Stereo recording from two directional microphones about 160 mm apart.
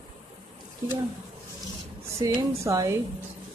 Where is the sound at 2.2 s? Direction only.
20° right (ahead or behind).